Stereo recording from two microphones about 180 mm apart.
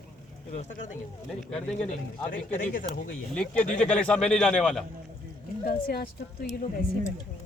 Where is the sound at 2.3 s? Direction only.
50° left (ahead or behind).